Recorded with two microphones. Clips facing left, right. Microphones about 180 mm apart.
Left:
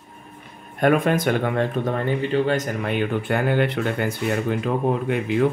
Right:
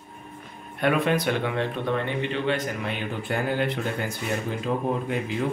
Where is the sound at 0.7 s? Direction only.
45° left (ahead or behind); by 3.8 s 60° left (ahead or behind).